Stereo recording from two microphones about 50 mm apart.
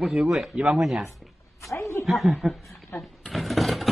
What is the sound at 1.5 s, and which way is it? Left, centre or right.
Speech, left.